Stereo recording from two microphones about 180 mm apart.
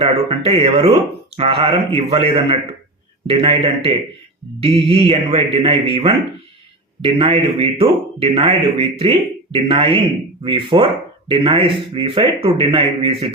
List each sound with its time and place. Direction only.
0.0 s speech: 30° right (ahead or behind)